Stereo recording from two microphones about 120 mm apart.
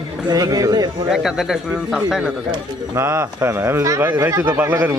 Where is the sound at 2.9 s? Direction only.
20° right (ahead or behind).